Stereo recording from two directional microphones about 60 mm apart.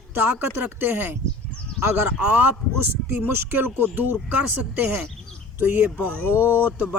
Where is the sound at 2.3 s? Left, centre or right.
Right.